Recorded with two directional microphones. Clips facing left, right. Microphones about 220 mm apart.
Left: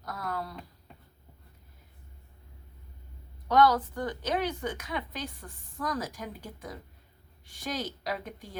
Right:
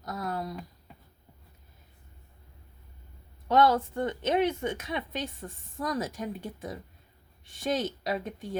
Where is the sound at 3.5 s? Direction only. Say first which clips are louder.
Even; 25° right (ahead or behind).